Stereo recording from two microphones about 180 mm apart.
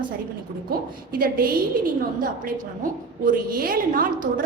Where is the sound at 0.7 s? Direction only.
55° right (ahead or behind).